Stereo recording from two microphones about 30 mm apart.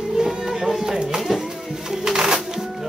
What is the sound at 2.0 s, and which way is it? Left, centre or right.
Music, right.